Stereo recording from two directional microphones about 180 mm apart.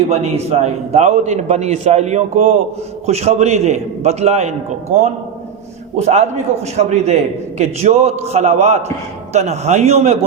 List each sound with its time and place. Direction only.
0.1 s a man's voice: 35° right (ahead or behind)
6.0 s a man's voice: 40° right (ahead or behind)